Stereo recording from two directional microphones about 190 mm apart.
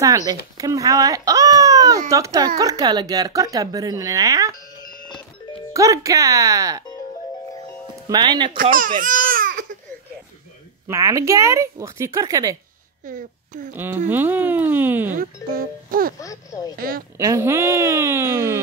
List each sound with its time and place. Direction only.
0.3 s speech: 20° right (ahead or behind)
5.7 s speech: 15° right (ahead or behind)
8.1 s speech: 25° right (ahead or behind)
8.5 s babbling: 45° right (ahead or behind)
10.9 s speech: 15° right (ahead or behind)
13.0 s speech: 45° right (ahead or behind)
13.7 s speech: 10° right (ahead or behind)
15.1 s music: 50° right (ahead or behind)
16.2 s a sound: 15° left (ahead or behind)
16.7 s a woman's voice: 50° right (ahead or behind)
17.2 s speech: 15° right (ahead or behind)